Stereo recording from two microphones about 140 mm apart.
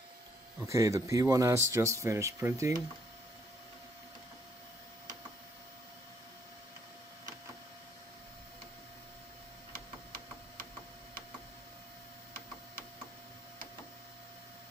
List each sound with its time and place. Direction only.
0.6 s a man's voice: 20° right (ahead or behind)
9.7 s printer: 90° right